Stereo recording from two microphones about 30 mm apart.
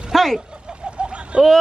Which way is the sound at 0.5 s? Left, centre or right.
Right.